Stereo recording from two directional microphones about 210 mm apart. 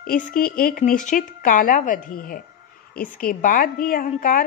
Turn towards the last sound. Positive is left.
turn(degrees=40)  # may be behind; listen again after turning